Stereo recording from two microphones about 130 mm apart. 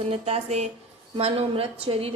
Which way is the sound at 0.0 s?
50° right (ahead or behind).